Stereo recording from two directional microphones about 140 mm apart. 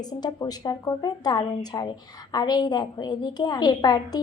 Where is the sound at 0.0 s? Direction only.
30° left (ahead or behind).